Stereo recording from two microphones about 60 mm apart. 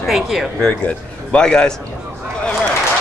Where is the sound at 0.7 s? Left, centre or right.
Centre.